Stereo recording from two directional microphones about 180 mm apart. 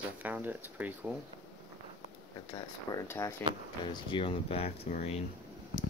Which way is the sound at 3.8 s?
25° left (ahead or behind).